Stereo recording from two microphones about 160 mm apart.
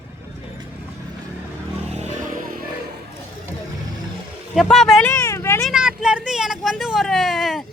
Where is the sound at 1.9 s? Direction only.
45° right (ahead or behind).